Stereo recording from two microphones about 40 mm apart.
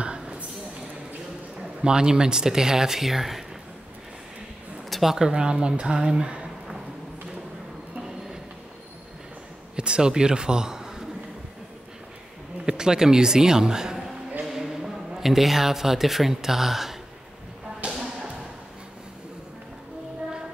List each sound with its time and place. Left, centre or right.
0.0 s a sound: right
1.8 s speech: centre
4.8 s a sound: centre
5.1 s a woman's voice: centre
9.8 s speech: right
12.6 s a man's voice: centre